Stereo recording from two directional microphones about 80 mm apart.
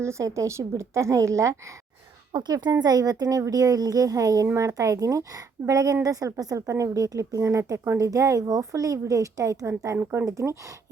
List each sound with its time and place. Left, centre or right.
0.0 s a woman's voice: right
2.3 s speech: right
2.8 s a woman's voice: right
10.0 s speech: right
10.2 s a woman's voice: right